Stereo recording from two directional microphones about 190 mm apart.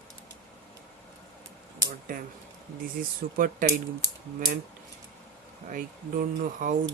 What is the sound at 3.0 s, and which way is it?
Speech, 45° right (ahead or behind).